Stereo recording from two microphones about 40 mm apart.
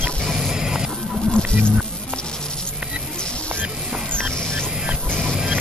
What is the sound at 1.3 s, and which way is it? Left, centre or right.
Music, left.